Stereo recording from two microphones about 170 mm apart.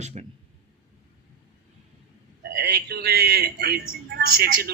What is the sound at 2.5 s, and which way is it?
A man's voice, 70° right (ahead or behind).